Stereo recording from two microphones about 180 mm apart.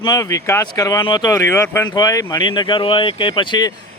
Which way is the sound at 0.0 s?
20° left (ahead or behind).